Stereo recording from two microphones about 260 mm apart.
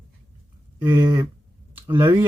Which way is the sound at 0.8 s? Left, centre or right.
Centre.